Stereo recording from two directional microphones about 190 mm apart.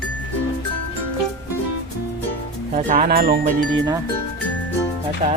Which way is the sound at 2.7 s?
45° right (ahead or behind).